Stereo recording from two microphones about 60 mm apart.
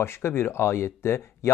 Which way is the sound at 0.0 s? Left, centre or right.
Left.